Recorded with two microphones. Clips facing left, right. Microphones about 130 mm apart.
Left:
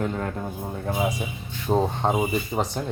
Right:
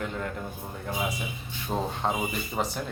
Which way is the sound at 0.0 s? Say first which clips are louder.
Left 5 dB; 35° left (ahead or behind).